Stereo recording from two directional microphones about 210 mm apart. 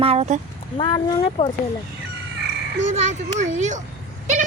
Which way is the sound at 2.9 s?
35° right (ahead or behind).